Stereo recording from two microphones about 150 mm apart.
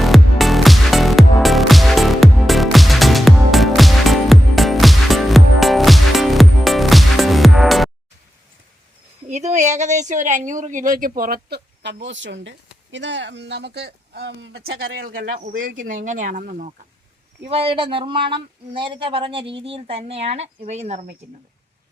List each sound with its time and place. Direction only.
0.0 s music: centre (ahead or behind)
9.3 s a woman's voice: 50° right (ahead or behind); by 11.6 s 85° right
13.7 s speech: 90° right; by 16.7 s 60° right (ahead or behind)
17.5 s speech: 40° right (ahead or behind)